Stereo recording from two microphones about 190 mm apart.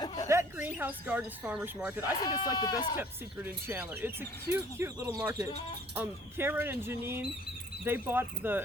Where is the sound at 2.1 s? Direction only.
20° left (ahead or behind).